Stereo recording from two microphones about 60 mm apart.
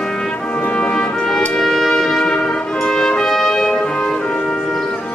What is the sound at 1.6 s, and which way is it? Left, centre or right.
Trumpet, centre.